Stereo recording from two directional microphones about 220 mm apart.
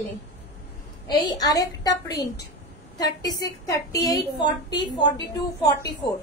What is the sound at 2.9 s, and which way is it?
A woman's voice, 20° left (ahead or behind).